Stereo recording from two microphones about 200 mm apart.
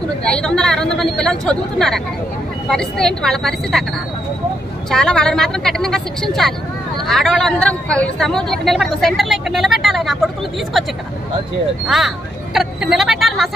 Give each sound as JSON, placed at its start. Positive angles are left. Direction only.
{"t": 0.2, "sound": "speech", "side_deg": 5}
{"t": 4.9, "sound": "speech", "side_deg": 5}
{"t": 12.5, "sound": "speech", "side_deg": 0}